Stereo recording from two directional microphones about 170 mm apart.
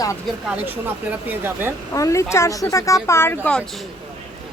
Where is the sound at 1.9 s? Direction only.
20° left (ahead or behind).